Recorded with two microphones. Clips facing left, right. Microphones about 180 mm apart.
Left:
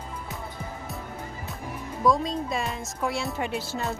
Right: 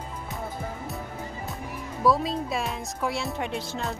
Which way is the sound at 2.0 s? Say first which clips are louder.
Even; 5° right (ahead or behind).